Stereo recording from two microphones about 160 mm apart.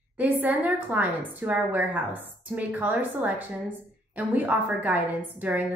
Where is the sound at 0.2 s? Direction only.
10° right (ahead or behind).